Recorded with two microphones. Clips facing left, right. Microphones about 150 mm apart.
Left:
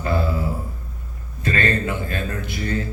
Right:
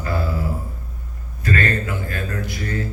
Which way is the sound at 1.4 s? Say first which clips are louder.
Even; 25° left (ahead or behind).